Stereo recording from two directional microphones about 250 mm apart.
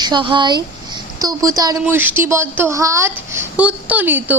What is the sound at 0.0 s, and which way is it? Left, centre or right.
A woman's voice, centre.